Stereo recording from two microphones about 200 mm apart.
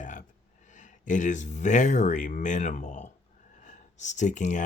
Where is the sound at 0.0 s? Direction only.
40° left (ahead or behind).